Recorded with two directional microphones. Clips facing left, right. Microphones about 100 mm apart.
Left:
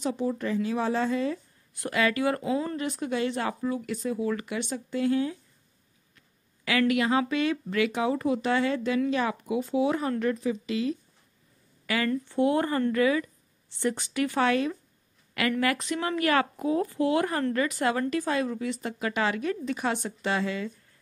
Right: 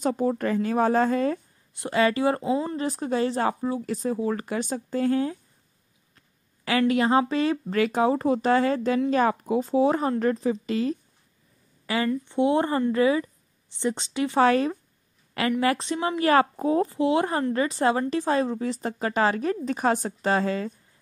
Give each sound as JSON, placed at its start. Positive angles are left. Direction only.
{"t": 0.0, "sound": "speech", "side_deg": -45}
{"t": 1.7, "sound": "speech", "side_deg": -25}
{"t": 6.1, "sound": "a sound", "side_deg": -35}
{"t": 6.8, "sound": "speech", "side_deg": -35}
{"t": 11.8, "sound": "a sound", "side_deg": -30}
{"t": 12.3, "sound": "a woman's voice", "side_deg": -20}
{"t": 14.4, "sound": "a woman's voice", "side_deg": -40}
{"t": 16.3, "sound": "speech", "side_deg": -35}
{"t": 16.9, "sound": "a woman's voice", "side_deg": -25}